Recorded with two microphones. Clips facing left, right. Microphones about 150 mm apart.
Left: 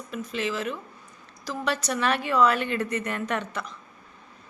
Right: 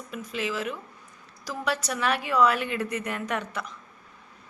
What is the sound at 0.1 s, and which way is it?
A woman's voice, 10° right (ahead or behind).